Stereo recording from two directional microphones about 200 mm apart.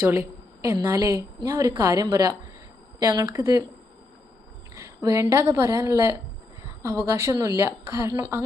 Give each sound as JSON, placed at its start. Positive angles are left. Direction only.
{"t": 0.0, "sound": "a woman's voice", "side_deg": -10}
{"t": 4.7, "sound": "a woman's voice", "side_deg": -15}